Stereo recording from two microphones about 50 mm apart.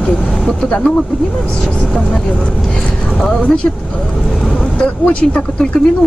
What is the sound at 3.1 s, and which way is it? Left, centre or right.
Speech, centre.